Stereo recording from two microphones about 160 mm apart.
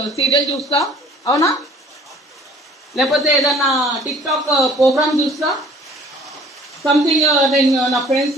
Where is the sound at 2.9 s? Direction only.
Centre (ahead or behind).